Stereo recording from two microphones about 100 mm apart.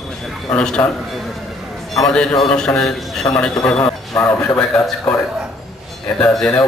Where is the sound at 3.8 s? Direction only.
20° left (ahead or behind).